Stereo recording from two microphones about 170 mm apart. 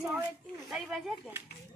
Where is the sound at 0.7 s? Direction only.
Centre (ahead or behind).